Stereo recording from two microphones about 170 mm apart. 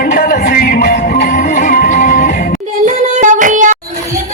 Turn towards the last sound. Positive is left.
turn(degrees=-50)  # may be behind; listen again after turning